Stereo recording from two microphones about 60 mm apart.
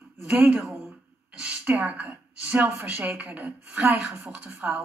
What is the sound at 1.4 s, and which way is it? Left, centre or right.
Speech, right.